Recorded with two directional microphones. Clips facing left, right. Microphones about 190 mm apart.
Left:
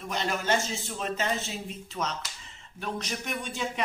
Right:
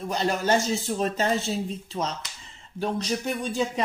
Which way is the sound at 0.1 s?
35° right (ahead or behind).